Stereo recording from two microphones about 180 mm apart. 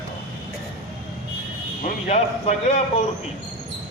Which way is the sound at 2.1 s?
35° left (ahead or behind).